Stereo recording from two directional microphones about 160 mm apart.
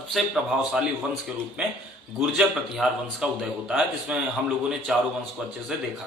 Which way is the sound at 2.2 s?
5° right (ahead or behind).